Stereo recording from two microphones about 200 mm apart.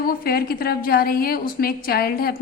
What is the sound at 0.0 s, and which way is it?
A woman's voice, 50° left (ahead or behind).